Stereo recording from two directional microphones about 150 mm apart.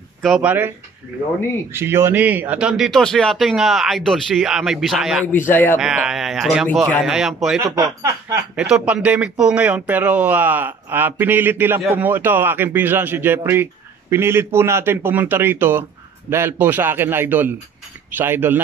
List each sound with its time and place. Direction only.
0.2 s speech: centre (ahead or behind)
0.5 s speech: 15° right (ahead or behind)
5.2 s speech: 15° left (ahead or behind)
5.8 s speech: 5° right (ahead or behind)